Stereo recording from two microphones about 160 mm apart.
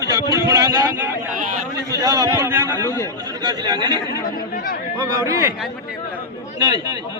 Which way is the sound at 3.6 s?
25° right (ahead or behind).